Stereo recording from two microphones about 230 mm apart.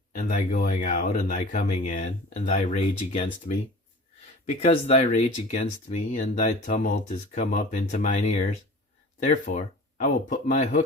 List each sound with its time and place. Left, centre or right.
0.2 s speech: left